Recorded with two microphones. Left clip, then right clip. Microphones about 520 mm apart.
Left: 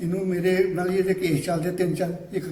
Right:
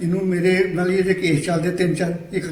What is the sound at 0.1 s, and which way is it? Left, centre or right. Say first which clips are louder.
A man's voice: right 4 dB; left.